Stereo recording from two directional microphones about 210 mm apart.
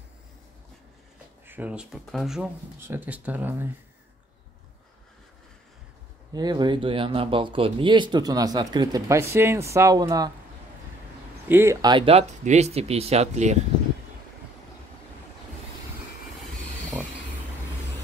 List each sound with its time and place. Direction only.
1.5 s speech: 5° right (ahead or behind)
6.3 s speech: 20° right (ahead or behind)
11.4 s speech: 10° right (ahead or behind); by 13.6 s 30° right (ahead or behind)